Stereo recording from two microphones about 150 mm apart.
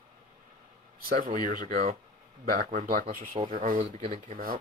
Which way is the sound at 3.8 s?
40° right (ahead or behind).